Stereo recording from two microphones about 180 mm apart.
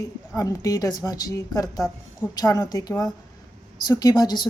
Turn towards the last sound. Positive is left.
turn(degrees=20)  # may be behind; listen again after turning